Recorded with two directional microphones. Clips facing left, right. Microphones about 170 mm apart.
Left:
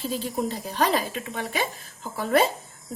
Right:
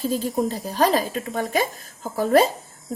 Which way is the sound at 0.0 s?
45° right (ahead or behind).